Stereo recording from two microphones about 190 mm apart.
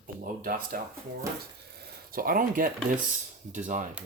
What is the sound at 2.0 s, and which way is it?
Speech, 50° right (ahead or behind).